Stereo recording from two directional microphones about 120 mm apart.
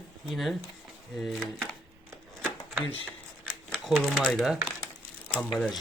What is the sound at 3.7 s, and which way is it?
Speech, centre (ahead or behind).